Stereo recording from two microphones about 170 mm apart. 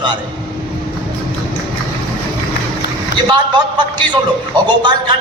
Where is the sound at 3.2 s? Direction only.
25° right (ahead or behind).